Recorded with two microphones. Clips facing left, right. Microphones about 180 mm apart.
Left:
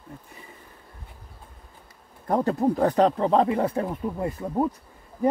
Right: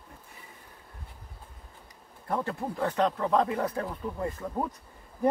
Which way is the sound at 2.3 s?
40° left (ahead or behind).